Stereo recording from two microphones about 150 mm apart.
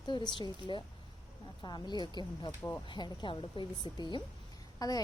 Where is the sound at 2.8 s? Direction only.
30° left (ahead or behind).